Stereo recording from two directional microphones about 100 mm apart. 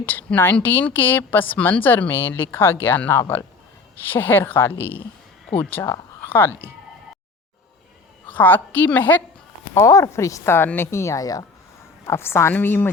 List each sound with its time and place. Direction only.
0.0 s a woman's voice: 20° left (ahead or behind)
8.3 s a woman's voice: 20° left (ahead or behind)
9.8 s speech: 30° left (ahead or behind)
12.0 s a woman's voice: 25° left (ahead or behind)